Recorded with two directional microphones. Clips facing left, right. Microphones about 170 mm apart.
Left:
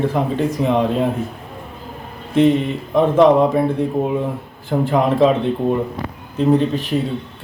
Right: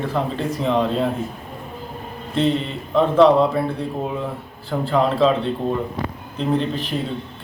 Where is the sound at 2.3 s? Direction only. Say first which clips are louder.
Left 6 dB; 15° left (ahead or behind).